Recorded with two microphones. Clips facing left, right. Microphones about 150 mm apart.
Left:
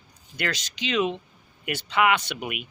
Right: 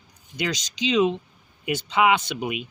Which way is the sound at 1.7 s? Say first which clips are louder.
Right 2 dB; 20° right (ahead or behind).